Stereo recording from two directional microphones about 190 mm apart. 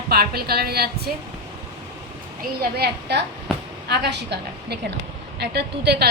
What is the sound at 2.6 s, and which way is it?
A woman's voice, 55° right (ahead or behind).